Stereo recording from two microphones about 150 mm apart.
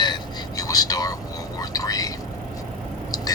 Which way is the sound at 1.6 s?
25° left (ahead or behind).